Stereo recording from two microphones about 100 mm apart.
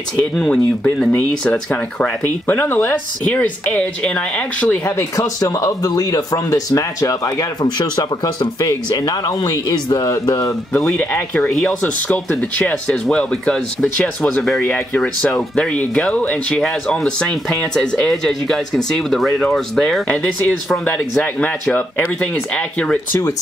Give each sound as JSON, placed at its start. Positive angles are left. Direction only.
{"t": 0.4, "sound": "speech", "side_deg": 5}
{"t": 4.8, "sound": "speech", "side_deg": 30}
{"t": 11.0, "sound": "speech", "side_deg": 15}